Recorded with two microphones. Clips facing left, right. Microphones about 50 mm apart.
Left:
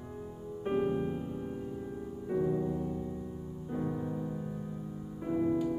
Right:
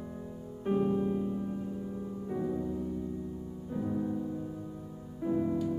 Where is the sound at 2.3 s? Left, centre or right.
Centre.